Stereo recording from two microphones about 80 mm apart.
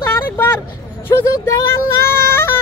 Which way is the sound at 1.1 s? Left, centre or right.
Left.